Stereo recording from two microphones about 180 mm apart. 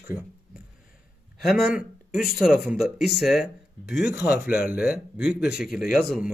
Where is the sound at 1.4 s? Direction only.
5° right (ahead or behind).